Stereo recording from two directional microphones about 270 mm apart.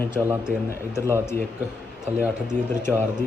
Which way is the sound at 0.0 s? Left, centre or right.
Centre.